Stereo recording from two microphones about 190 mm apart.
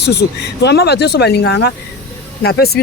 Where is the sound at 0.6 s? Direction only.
60° left (ahead or behind).